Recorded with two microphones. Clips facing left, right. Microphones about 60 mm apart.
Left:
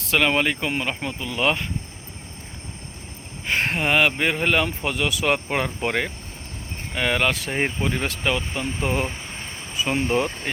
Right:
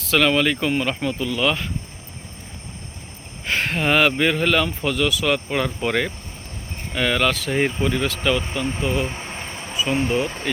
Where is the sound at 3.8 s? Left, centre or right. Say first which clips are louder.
Right 3 dB; centre.